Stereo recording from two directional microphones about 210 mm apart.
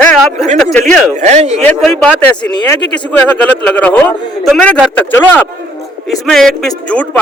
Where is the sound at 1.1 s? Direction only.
35° right (ahead or behind).